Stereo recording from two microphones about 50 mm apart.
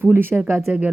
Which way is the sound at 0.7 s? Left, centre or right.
Right.